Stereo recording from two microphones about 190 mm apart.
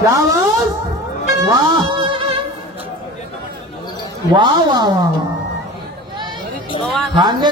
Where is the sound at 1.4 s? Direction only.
20° right (ahead or behind).